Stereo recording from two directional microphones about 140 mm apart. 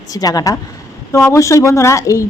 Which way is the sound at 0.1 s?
25° left (ahead or behind).